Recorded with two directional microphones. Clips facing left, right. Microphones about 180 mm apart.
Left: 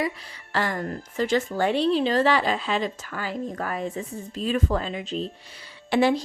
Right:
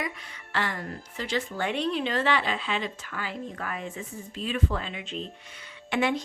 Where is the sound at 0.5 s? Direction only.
40° left (ahead or behind).